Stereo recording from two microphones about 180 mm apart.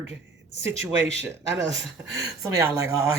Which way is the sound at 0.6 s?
85° right.